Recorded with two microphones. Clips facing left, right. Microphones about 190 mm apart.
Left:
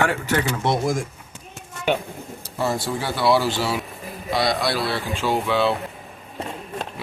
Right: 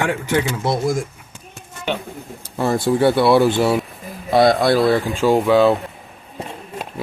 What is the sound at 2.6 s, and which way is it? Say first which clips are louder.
Speech: right 8 dB; 50° right (ahead or behind).